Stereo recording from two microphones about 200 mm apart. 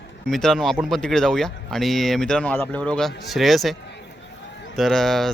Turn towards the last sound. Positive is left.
turn(degrees=0)  # may be behind; listen again after turning